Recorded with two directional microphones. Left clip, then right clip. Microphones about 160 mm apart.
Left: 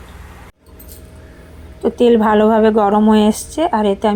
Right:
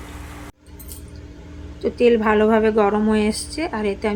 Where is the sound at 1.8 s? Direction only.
20° left (ahead or behind).